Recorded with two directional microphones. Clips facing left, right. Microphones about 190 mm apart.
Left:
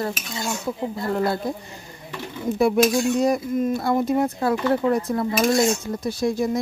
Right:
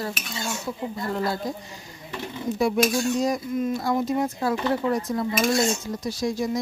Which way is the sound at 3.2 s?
60° left (ahead or behind).